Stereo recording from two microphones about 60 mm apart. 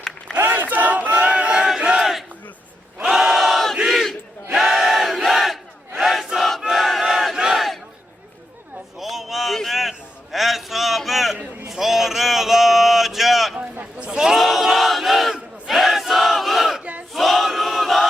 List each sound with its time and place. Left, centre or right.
0.3 s crowd: right
0.7 s battle cry: right; by 6.2 s centre
6.3 s choir: centre
6.7 s battle cry: centre
9.0 s a sound: centre
14.0 s battle cry: centre